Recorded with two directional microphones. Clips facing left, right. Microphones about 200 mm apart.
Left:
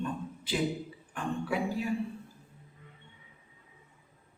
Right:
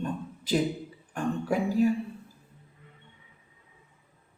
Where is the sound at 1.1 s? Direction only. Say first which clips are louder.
Right 4 dB; 45° right (ahead or behind).